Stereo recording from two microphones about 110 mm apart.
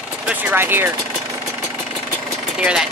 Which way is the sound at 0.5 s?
20° right (ahead or behind).